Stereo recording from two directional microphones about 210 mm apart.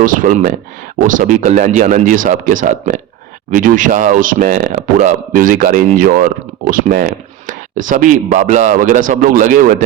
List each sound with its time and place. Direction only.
0.0 s speech: 40° right (ahead or behind)